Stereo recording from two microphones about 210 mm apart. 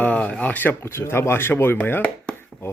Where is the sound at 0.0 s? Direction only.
5° left (ahead or behind).